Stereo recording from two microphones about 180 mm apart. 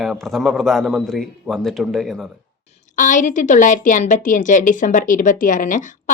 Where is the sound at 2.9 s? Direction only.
45° left (ahead or behind).